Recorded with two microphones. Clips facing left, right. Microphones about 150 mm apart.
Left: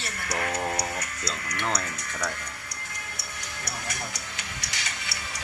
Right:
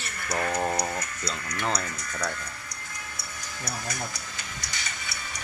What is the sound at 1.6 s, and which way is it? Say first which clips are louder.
Speech: right 1 dB; centre (ahead or behind).